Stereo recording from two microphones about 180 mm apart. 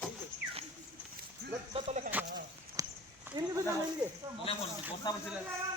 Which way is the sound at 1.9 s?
40° right (ahead or behind).